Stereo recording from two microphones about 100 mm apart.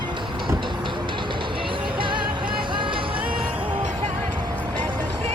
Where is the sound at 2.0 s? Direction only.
55° right (ahead or behind).